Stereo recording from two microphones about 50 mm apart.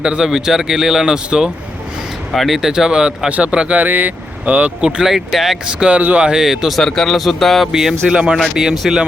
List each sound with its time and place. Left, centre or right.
0.0 s speech: centre
2.3 s speech: centre
2.6 s speech: centre
3.2 s speech: right
3.8 s speech: right
5.0 s speech: centre
5.9 s speech: right
6.1 s speech: centre
6.8 s speech: centre
7.7 s speech: centre